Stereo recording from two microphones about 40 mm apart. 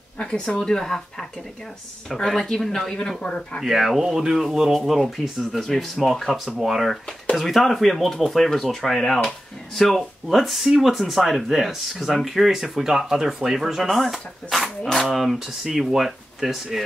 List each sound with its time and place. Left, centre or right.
0.2 s speech: left
2.3 s speech: centre
3.2 s speech: left
3.6 s speech: centre
4.7 s speech: centre
13.9 s speech: centre